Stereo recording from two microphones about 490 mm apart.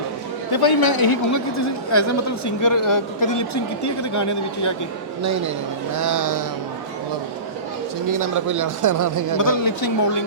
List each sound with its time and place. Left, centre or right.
0.5 s a man's voice: left
5.9 s speech: right
8.0 s speech: right
9.4 s a man's voice: left